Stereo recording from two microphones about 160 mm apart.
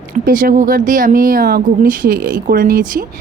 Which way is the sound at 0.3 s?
60° right (ahead or behind).